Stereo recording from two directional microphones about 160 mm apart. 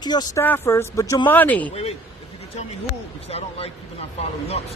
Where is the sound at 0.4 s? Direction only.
15° left (ahead or behind).